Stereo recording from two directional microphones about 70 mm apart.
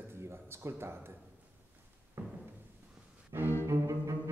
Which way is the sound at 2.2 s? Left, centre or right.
Right.